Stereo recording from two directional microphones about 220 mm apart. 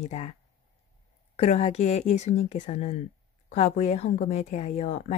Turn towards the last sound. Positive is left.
turn(degrees=30)  # may be behind; listen again after turning